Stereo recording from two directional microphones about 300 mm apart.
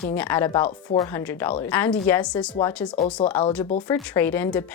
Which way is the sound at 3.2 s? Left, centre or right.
Left.